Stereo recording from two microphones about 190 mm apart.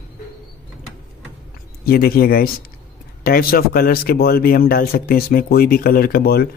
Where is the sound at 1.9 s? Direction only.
50° left (ahead or behind).